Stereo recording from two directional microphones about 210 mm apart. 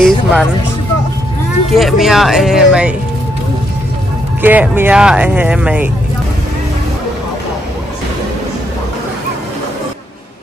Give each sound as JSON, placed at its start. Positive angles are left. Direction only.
{"t": 0.0, "sound": "music", "side_deg": 0}
{"t": 1.7, "sound": "speech", "side_deg": 0}
{"t": 4.4, "sound": "speech", "side_deg": -10}